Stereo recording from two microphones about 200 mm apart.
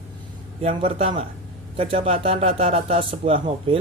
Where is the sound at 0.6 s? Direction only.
30° right (ahead or behind).